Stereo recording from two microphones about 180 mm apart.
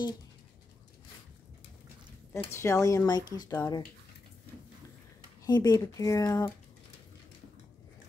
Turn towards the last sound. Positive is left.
turn(degrees=20)  # may be behind; listen again after turning